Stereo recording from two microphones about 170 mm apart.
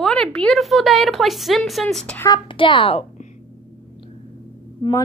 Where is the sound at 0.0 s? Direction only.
5° left (ahead or behind).